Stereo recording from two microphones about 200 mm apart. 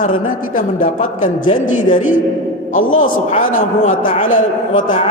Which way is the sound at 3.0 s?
40° left (ahead or behind).